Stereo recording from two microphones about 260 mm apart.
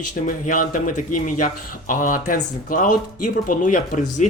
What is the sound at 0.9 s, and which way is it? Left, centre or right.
Speech, left.